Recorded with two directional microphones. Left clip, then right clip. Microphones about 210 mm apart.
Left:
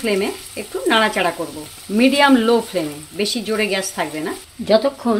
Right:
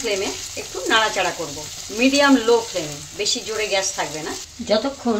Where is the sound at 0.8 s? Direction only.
50° left (ahead or behind).